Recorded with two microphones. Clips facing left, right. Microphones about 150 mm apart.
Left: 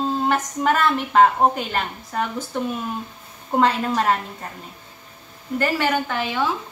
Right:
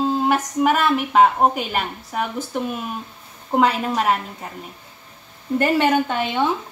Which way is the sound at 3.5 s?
5° right (ahead or behind).